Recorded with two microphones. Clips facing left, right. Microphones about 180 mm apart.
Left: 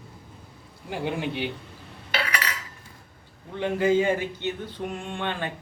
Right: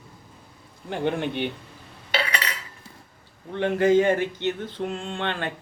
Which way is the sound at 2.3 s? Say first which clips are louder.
Even; 30° right (ahead or behind).